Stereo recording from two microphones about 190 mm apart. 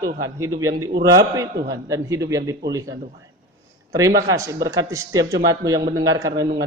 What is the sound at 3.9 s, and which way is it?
A man's voice, 15° right (ahead or behind).